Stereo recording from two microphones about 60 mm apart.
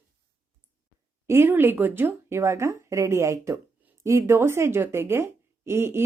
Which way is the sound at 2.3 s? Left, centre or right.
Right.